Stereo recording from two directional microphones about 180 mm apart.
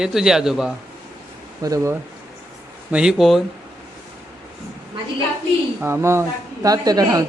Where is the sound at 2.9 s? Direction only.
5° right (ahead or behind).